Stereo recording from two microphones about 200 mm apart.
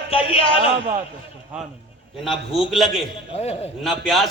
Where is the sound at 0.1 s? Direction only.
25° left (ahead or behind).